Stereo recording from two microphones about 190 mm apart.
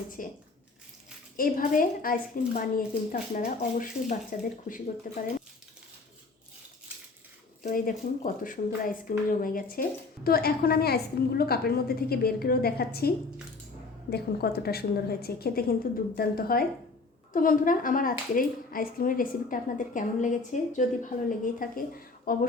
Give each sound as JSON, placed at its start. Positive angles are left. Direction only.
{"t": 0.2, "sound": "speech", "side_deg": 45}
{"t": 1.4, "sound": "speech", "side_deg": 45}
{"t": 7.6, "sound": "a woman's voice", "side_deg": 45}